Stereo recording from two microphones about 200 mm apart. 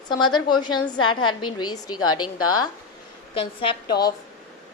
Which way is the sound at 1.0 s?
90° left.